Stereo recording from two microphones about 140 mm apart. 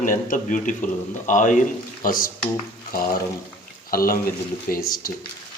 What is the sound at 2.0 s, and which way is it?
Speech, 90° left.